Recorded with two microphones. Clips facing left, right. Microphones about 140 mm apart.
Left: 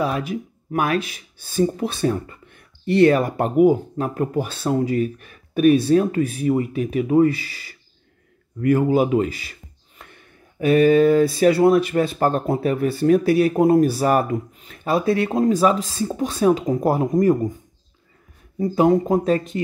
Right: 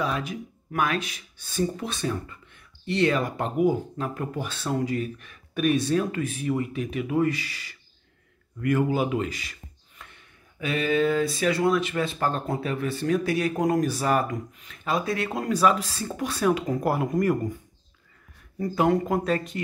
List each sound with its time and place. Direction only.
0.0 s a man's voice: 40° left (ahead or behind); by 17.3 s 25° left (ahead or behind)
18.6 s speech: 20° left (ahead or behind)